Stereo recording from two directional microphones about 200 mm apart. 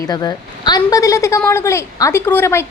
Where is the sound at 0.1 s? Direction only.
20° left (ahead or behind).